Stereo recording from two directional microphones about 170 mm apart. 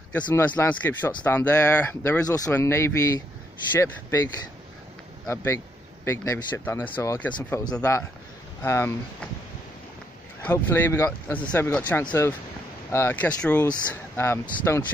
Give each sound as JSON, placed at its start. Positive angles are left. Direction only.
{"t": 0.6, "sound": "speech", "side_deg": 10}
{"t": 5.3, "sound": "speech", "side_deg": 15}
{"t": 10.4, "sound": "speech", "side_deg": 10}